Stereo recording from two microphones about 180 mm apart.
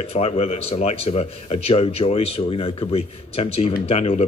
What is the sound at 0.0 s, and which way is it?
Speech, 35° left (ahead or behind).